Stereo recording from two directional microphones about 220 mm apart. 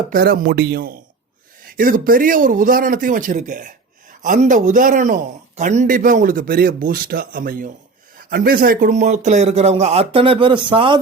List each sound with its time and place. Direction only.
0.1 s a man's voice: 45° right (ahead or behind); by 11.0 s 20° right (ahead or behind)